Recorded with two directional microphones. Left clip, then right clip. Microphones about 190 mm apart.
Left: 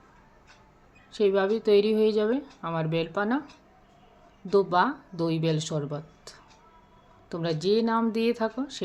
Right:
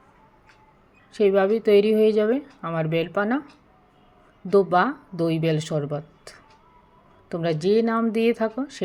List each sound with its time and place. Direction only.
1.1 s a woman's voice: 15° right (ahead or behind)
4.4 s a woman's voice: 15° right (ahead or behind)